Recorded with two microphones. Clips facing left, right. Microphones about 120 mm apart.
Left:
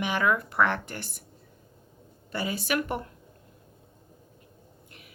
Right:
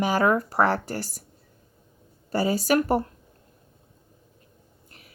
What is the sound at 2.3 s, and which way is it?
Speech, 40° right (ahead or behind).